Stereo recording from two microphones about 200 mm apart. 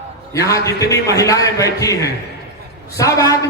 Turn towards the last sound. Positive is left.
turn(degrees=15)  # may be behind; listen again after turning